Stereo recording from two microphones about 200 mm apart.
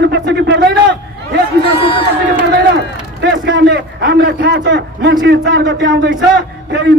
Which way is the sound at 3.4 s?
55° right (ahead or behind).